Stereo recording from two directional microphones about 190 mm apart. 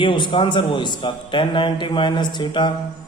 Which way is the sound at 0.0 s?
25° left (ahead or behind).